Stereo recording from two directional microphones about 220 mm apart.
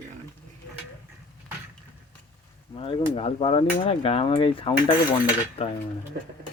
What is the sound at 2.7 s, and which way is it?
Speech, 25° left (ahead or behind).